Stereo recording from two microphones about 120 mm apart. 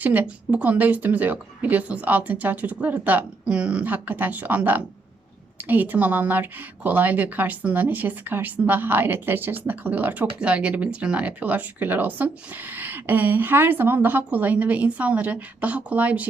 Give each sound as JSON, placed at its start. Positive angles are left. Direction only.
{"t": 0.0, "sound": "speech", "side_deg": -15}